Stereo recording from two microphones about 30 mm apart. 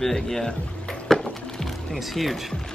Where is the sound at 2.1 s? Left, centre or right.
Centre.